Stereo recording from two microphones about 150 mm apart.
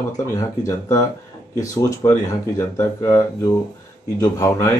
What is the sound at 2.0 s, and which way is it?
Speech, 30° left (ahead or behind).